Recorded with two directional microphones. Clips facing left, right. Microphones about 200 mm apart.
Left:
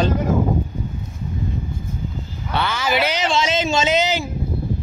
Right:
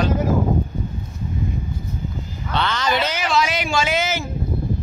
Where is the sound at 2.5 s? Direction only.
5° left (ahead or behind).